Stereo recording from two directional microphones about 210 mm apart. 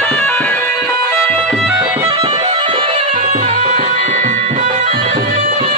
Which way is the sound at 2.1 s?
20° right (ahead or behind).